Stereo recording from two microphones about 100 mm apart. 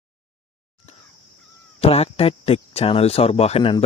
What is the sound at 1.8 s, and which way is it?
A man's voice, 85° left.